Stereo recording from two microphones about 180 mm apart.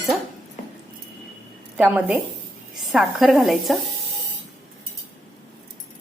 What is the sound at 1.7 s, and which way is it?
A woman's voice, 10° right (ahead or behind).